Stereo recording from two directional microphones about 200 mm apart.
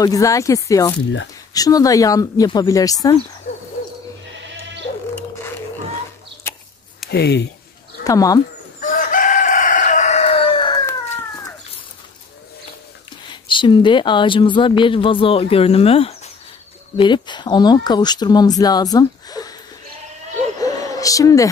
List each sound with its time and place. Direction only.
0.0 s speech: 15° left (ahead or behind)
7.1 s speech: 55° left (ahead or behind)
8.0 s speech: 15° left (ahead or behind)
8.8 s chicken: 40° left (ahead or behind)
13.3 s speech: 25° left (ahead or behind)
20.5 s a sound: 15° left (ahead or behind)